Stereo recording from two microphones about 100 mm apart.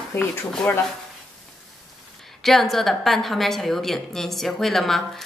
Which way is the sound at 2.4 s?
Centre (ahead or behind).